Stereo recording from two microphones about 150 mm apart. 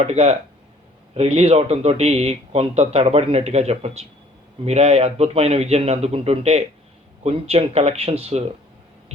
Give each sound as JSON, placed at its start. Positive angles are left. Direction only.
{"t": 0.0, "sound": "speech", "side_deg": -45}